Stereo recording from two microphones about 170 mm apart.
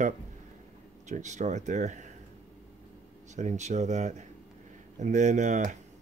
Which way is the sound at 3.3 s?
45° right (ahead or behind).